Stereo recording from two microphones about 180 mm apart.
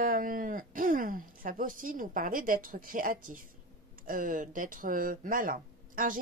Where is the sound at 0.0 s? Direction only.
50° right (ahead or behind).